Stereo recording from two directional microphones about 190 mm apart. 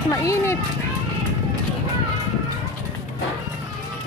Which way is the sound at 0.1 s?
15° left (ahead or behind).